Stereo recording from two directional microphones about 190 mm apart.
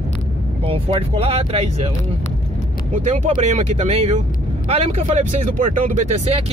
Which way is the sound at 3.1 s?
40° right (ahead or behind).